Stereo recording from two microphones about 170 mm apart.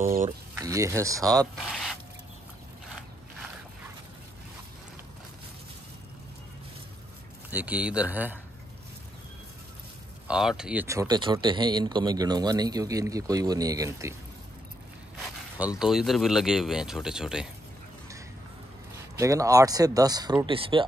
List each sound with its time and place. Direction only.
0.0 s speech: 55° right (ahead or behind)
0.6 s speech: 20° right (ahead or behind)
1.7 s speech: centre (ahead or behind)
7.5 s speech: 10° right (ahead or behind)
10.2 s speech: 5° right (ahead or behind)
15.6 s speech: 5° right (ahead or behind)
19.1 s speech: 20° right (ahead or behind)